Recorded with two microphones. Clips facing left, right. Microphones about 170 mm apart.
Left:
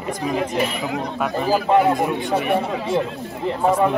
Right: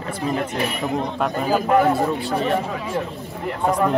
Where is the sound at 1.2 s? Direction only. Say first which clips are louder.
Left 2 dB; centre (ahead or behind).